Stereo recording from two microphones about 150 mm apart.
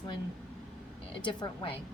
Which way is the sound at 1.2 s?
30° left (ahead or behind).